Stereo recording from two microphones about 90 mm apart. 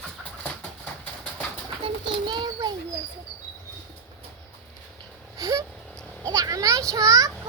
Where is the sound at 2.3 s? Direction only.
50° right (ahead or behind).